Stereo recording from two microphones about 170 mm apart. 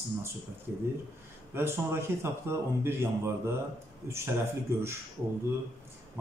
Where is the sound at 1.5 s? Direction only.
15° right (ahead or behind).